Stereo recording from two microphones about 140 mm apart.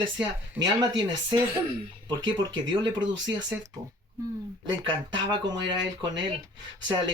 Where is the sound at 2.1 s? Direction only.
30° right (ahead or behind).